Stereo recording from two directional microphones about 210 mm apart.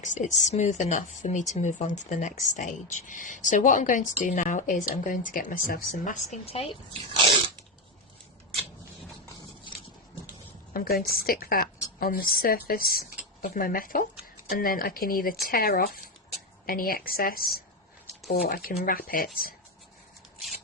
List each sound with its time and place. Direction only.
0.0 s speech: 35° left (ahead or behind)
10.8 s a woman's voice: 45° left (ahead or behind)